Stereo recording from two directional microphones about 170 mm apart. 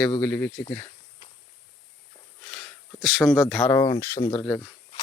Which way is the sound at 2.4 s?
Centre (ahead or behind).